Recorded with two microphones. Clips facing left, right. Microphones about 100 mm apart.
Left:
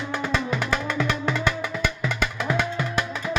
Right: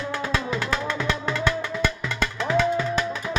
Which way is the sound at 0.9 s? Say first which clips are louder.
Left 1 dB; centre (ahead or behind).